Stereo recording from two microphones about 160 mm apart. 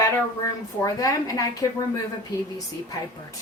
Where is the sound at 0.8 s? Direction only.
20° left (ahead or behind).